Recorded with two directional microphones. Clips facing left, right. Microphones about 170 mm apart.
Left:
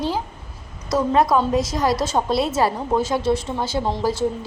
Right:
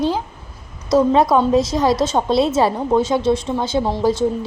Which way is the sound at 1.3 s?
20° right (ahead or behind).